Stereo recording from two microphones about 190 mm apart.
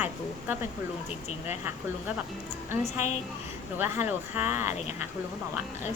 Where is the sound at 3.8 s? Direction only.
10° right (ahead or behind).